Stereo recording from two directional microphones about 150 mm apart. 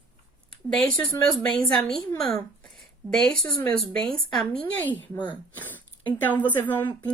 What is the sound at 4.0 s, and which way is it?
Speech, 5° left (ahead or behind).